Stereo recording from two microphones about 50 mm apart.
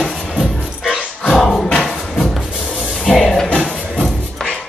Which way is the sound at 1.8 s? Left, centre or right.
Centre.